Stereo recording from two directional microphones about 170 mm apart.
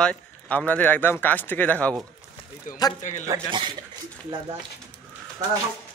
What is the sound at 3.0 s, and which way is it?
Speech, 45° left (ahead or behind).